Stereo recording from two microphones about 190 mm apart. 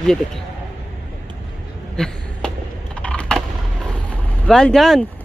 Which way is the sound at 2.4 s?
5° left (ahead or behind).